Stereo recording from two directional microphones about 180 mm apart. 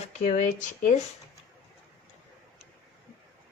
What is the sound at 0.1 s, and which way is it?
Speech, 40° left (ahead or behind).